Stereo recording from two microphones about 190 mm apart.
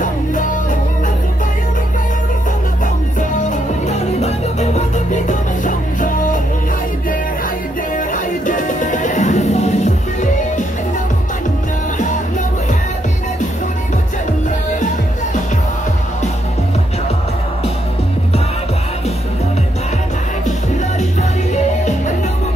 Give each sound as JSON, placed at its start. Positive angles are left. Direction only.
{"t": 0.0, "sound": "music", "side_deg": 40}
{"t": 3.2, "sound": "music", "side_deg": 40}
{"t": 7.9, "sound": "music", "side_deg": 45}
{"t": 21.5, "sound": "music", "side_deg": 40}